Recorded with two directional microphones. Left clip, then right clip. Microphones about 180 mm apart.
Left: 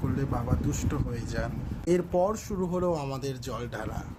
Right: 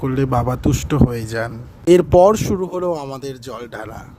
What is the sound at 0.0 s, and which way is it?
A man's voice, 50° right (ahead or behind).